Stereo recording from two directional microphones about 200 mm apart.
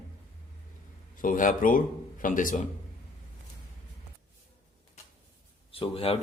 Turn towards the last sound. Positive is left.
turn(degrees=30)  # may be behind; listen again after turning